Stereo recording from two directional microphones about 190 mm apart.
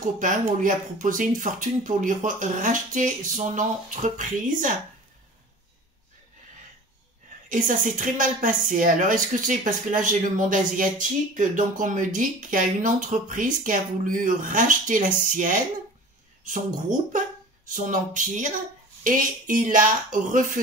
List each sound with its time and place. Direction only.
0.2 s speech: 45° right (ahead or behind)
7.4 s speech: 45° right (ahead or behind)
17.6 s speech: 45° right (ahead or behind)